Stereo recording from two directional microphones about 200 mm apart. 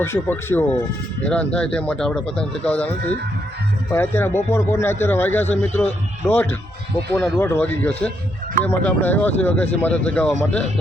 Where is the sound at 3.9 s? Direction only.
10° left (ahead or behind).